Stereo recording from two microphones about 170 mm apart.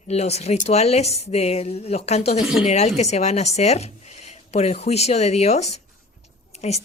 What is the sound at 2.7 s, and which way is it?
A woman's voice, 40° left (ahead or behind).